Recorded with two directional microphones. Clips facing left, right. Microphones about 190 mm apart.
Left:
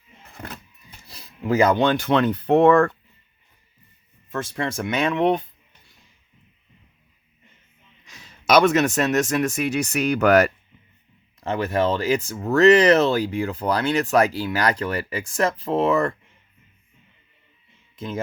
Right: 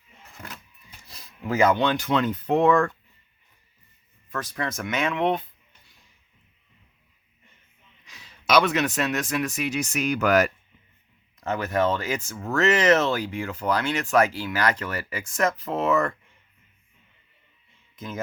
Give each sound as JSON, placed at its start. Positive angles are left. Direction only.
{"t": 1.0, "sound": "speech", "side_deg": 35}
{"t": 4.3, "sound": "speech", "side_deg": 25}
{"t": 8.0, "sound": "speech", "side_deg": 45}
{"t": 11.3, "sound": "speech", "side_deg": 30}
{"t": 17.9, "sound": "a sound", "side_deg": 30}